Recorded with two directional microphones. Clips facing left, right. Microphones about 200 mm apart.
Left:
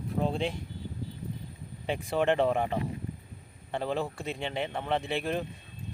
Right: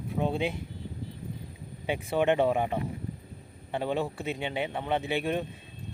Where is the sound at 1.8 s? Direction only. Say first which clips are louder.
Right 1 dB; 5° right (ahead or behind).